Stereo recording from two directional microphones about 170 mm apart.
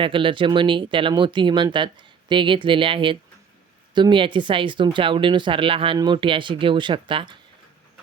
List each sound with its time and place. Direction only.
0.0 s speech: 30° right (ahead or behind)